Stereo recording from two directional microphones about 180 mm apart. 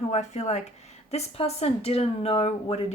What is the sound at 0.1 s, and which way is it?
Speech, 40° left (ahead or behind).